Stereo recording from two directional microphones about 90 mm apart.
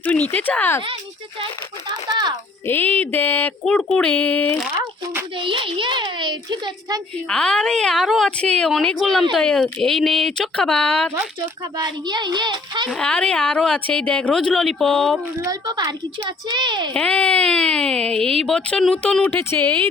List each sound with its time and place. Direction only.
0.0 s a sound: 20° left (ahead or behind)
1.9 s a child's voice: 50° right (ahead or behind)
2.6 s a sound: 20° left (ahead or behind)
3.6 s speech: 5° left (ahead or behind)
5.4 s a child's voice: 70° right (ahead or behind)
7.3 s speech: 10° left (ahead or behind)
11.8 s a woman's voice: 55° right (ahead or behind)
12.9 s speech: 10° left (ahead or behind)
15.4 s a child's voice: 45° right (ahead or behind)
16.9 s speech: 15° left (ahead or behind)
19.3 s a sound: 25° left (ahead or behind)